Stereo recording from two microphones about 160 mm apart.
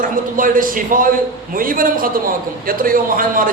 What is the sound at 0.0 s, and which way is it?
A man's voice, 60° right (ahead or behind).